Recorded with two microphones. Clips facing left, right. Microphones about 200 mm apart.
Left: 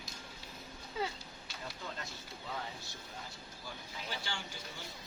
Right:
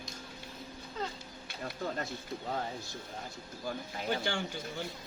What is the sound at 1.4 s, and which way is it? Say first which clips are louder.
Bee: right 8 dB; 55° right (ahead or behind).